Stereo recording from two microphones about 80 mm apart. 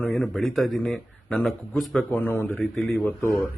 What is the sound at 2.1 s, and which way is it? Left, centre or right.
Speech, left.